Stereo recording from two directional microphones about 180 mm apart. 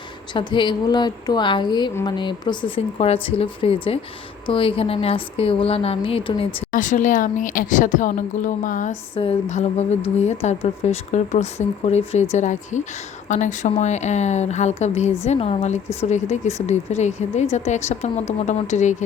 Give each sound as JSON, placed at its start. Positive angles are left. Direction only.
{"t": 0.3, "sound": "a woman's voice", "side_deg": 25}
{"t": 6.7, "sound": "a woman's voice", "side_deg": 45}